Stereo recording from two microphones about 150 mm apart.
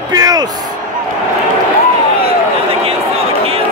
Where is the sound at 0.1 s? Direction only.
25° right (ahead or behind).